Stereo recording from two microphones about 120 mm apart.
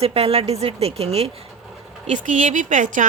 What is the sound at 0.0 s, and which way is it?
Speech, 55° right (ahead or behind).